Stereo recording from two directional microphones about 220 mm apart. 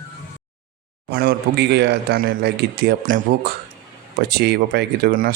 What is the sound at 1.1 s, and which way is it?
Speech, 45° right (ahead or behind).